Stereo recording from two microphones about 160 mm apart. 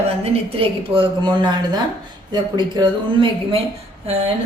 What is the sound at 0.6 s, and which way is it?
A woman's voice, 30° right (ahead or behind).